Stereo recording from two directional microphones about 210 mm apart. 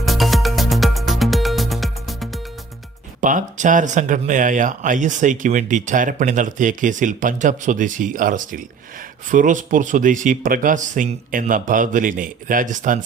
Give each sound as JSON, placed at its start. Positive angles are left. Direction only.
{"t": 0.0, "sound": "music", "side_deg": 0}
{"t": 3.2, "sound": "speech", "side_deg": -35}